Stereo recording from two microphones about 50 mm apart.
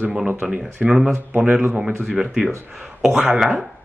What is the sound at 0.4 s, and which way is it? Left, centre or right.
Speech, right.